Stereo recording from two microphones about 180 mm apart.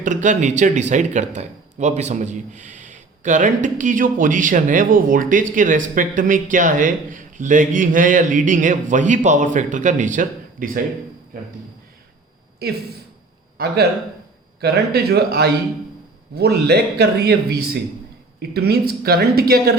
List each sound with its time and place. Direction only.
0.0 s a man's voice: 45° right (ahead or behind)
12.6 s a man's voice: 60° right (ahead or behind)
14.6 s a man's voice: 65° right (ahead or behind)